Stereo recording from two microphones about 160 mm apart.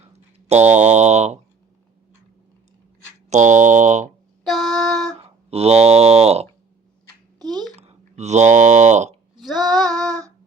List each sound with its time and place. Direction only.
0.0 s a sound: 40° right (ahead or behind)
3.2 s speech: 45° right (ahead or behind)
4.4 s child singing: centre (ahead or behind)
5.2 s speech: 40° right (ahead or behind)
7.8 s a sound: 45° right (ahead or behind)
9.4 s female singing: centre (ahead or behind)
9.6 s female singing: 25° right (ahead or behind)